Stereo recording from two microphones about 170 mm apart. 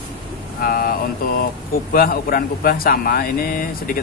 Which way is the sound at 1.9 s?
60° left (ahead or behind).